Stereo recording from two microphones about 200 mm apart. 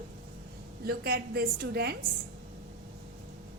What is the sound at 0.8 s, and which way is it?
A woman's voice, 50° right (ahead or behind).